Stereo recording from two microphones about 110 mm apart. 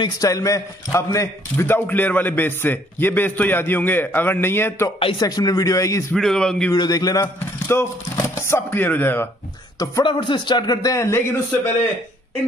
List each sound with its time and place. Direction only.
0.2 s a man's voice: 30° left (ahead or behind)
5.2 s speech: 35° left (ahead or behind)
6.1 s a man's voice: 5° left (ahead or behind)
6.7 s speech: 35° left (ahead or behind)
7.7 s a man's voice: 25° left (ahead or behind)
10.0 s speech: 45° left (ahead or behind); by 11.7 s 20° left (ahead or behind)